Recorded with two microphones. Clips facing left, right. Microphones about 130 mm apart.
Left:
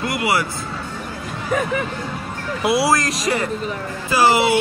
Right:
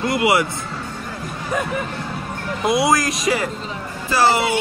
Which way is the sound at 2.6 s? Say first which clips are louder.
Even; centre (ahead or behind).